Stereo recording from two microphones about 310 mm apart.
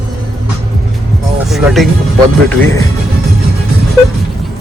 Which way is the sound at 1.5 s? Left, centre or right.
Centre.